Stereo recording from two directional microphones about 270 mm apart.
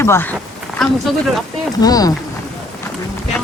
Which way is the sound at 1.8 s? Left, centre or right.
Centre.